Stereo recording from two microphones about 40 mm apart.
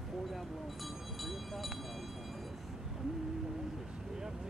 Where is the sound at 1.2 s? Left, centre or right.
Centre.